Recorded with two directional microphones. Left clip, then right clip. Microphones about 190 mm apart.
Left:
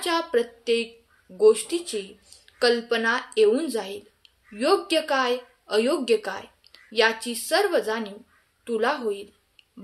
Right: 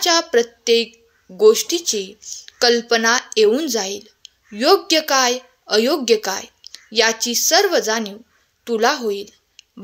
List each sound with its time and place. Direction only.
0.0 s a woman's voice: 45° right (ahead or behind)